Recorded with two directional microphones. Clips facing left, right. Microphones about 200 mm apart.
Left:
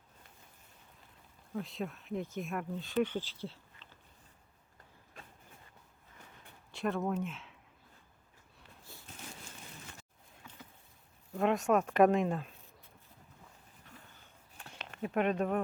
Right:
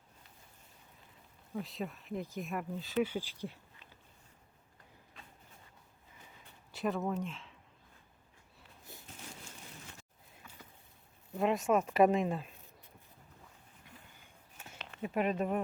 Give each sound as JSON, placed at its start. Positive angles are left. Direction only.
{"t": 1.5, "sound": "speech", "side_deg": 0}
{"t": 6.7, "sound": "speech", "side_deg": 0}
{"t": 8.8, "sound": "a sound", "side_deg": -20}
{"t": 11.3, "sound": "speech", "side_deg": 0}
{"t": 13.9, "sound": "a sound", "side_deg": -15}
{"t": 15.0, "sound": "speech", "side_deg": 0}